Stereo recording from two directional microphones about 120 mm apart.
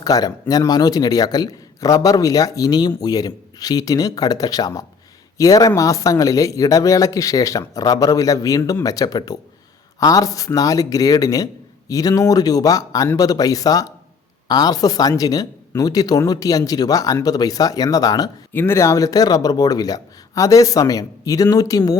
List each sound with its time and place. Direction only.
0.0 s speech: 30° left (ahead or behind)
18.5 s speech: 20° left (ahead or behind)